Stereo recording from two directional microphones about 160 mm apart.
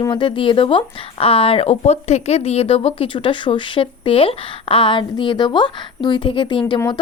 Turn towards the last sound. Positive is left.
turn(degrees=30)  # may be behind; listen again after turning